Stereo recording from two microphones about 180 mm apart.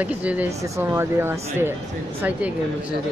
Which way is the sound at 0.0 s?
10° right (ahead or behind).